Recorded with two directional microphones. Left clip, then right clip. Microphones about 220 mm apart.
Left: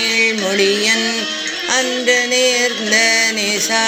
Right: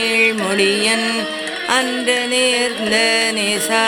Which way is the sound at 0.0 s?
10° right (ahead or behind).